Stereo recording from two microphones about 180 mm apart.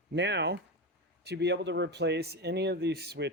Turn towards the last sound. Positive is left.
turn(degrees=-65)  # may be behind; listen again after turning